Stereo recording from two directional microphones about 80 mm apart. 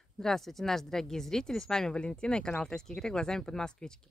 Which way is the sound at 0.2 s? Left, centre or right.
Centre.